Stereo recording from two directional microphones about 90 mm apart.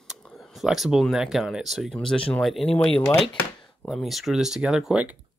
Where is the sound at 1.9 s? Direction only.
10° left (ahead or behind); by 5.1 s 10° right (ahead or behind).